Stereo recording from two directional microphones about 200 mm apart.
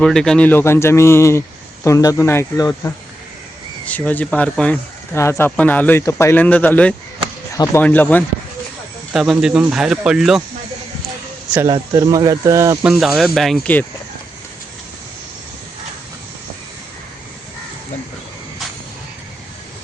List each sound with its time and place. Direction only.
0.0 s speech: 5° left (ahead or behind)
9.1 s speech: centre (ahead or behind)
11.7 s speech: 20° right (ahead or behind)
12.8 s speech: centre (ahead or behind)